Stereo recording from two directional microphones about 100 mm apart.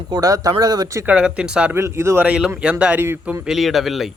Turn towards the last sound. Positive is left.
turn(degrees=0)  # may be behind; listen again after turning